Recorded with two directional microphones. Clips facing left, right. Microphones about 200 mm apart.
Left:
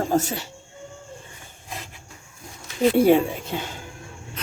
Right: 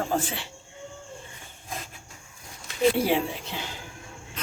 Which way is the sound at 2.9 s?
50° left (ahead or behind).